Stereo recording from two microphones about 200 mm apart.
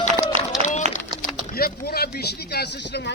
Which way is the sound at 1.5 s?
50° left (ahead or behind).